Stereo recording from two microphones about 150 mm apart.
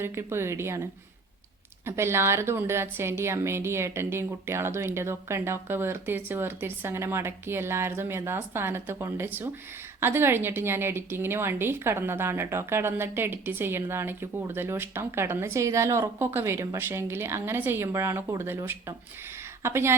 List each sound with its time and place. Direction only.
0.0 s a woman's voice: 15° right (ahead or behind)
1.8 s a woman's voice: 15° right (ahead or behind)